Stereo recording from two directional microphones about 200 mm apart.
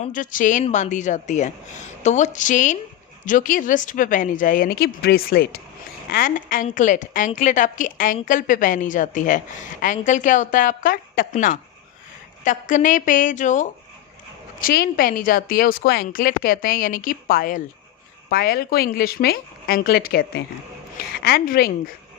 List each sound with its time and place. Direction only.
0.0 s a woman's voice: 40° left (ahead or behind)
14.6 s speech: 50° left (ahead or behind)